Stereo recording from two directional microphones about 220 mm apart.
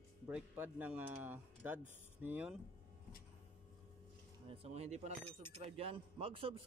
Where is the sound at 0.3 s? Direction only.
5° right (ahead or behind).